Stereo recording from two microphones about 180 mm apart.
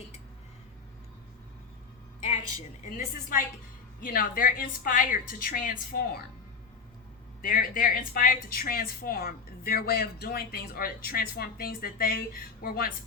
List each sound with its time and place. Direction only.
2.8 s a woman's voice: 45° left (ahead or behind)
7.4 s a woman's voice: 50° left (ahead or behind)